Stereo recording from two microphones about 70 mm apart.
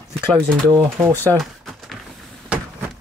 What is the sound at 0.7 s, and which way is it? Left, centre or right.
Speech, right.